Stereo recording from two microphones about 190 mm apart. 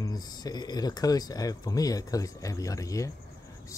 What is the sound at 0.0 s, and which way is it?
Speech, 20° left (ahead or behind).